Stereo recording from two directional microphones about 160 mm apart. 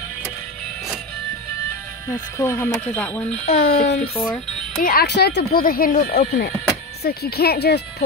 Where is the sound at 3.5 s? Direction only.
75° left (ahead or behind).